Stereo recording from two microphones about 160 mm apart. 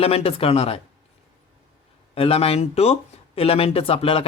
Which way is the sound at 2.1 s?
35° left (ahead or behind).